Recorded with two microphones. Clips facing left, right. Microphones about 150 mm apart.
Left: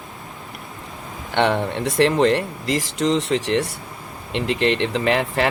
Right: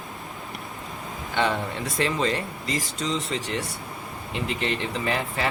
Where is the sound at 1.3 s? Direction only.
65° left (ahead or behind).